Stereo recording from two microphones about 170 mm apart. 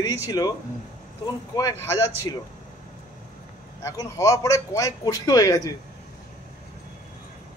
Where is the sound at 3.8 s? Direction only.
20° left (ahead or behind).